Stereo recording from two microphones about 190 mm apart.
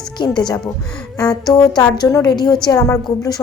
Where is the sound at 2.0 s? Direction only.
20° left (ahead or behind).